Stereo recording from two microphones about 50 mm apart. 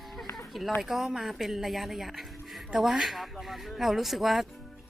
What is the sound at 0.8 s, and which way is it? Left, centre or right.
A woman's voice, centre.